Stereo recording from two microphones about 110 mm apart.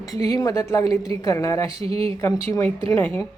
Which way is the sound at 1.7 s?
60° right (ahead or behind).